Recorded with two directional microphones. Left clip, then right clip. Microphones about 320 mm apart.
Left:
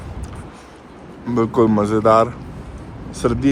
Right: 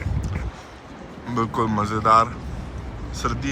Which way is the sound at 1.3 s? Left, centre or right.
Centre.